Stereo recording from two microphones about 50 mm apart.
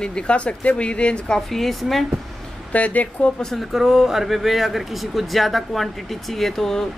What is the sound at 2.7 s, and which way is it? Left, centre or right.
Speech, left.